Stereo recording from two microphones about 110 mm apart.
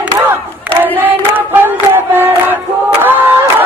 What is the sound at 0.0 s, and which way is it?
Crowd, 15° right (ahead or behind).